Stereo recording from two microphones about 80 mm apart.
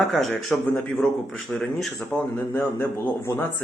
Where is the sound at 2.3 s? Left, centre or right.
Left.